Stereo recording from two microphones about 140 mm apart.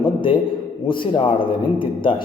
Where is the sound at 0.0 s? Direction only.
35° left (ahead or behind).